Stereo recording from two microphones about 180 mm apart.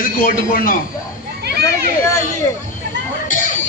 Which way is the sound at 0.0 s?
50° left (ahead or behind).